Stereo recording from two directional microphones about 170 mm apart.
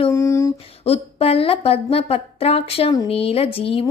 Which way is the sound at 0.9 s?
35° left (ahead or behind).